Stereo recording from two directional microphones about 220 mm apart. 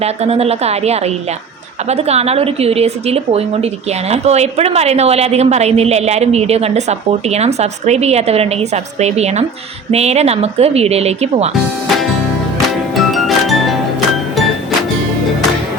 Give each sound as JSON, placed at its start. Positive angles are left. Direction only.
{"t": 0.0, "sound": "speech", "side_deg": -30}
{"t": 13.0, "sound": "music", "side_deg": 0}